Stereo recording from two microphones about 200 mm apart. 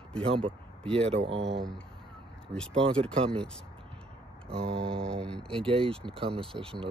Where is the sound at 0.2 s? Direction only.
25° right (ahead or behind).